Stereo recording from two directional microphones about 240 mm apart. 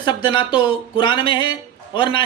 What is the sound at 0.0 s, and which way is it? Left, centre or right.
Speech, centre.